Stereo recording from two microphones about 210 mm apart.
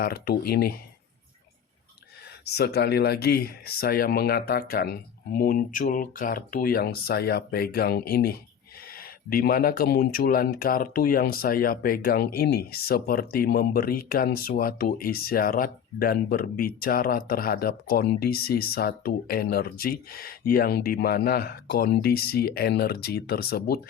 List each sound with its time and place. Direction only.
0.0 s speech: 45° left (ahead or behind)
2.4 s speech: 50° left (ahead or behind)